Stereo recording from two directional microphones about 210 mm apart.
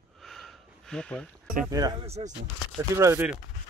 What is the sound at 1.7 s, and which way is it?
Speech, 15° right (ahead or behind).